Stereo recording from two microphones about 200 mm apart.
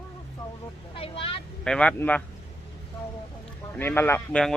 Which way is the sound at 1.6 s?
5° left (ahead or behind).